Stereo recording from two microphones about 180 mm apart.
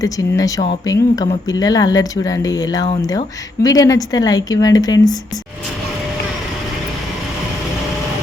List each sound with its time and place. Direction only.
0.0 s speech: 20° left (ahead or behind)